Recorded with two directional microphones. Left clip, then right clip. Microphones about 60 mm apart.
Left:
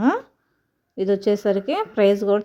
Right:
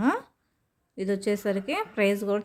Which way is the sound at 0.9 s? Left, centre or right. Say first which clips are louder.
Left 8 dB; left.